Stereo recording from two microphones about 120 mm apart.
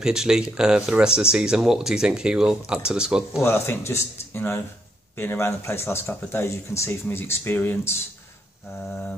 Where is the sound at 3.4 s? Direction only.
20° left (ahead or behind).